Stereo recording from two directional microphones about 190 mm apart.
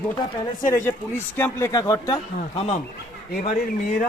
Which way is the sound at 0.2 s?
15° left (ahead or behind).